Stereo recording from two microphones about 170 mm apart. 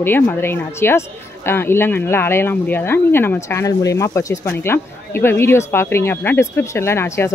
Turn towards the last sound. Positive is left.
turn(degrees=15)  # may be behind; listen again after turning